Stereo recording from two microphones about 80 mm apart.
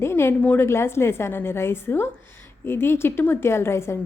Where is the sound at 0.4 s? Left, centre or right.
Left.